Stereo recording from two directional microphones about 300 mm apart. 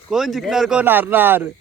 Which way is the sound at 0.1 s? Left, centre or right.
Centre.